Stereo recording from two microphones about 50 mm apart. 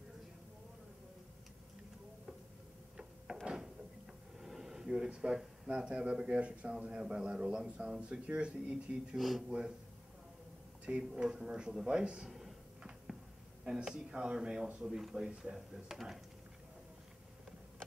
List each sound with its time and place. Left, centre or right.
3.3 s a sound: centre
5.7 s a man's voice: centre
9.1 s speech: centre
9.5 s speech: centre
10.9 s speech: centre
12.3 s a sound: centre
13.8 s speech: centre